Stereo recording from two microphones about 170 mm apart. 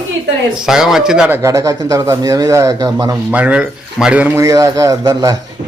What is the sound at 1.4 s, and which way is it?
Speech, 20° right (ahead or behind).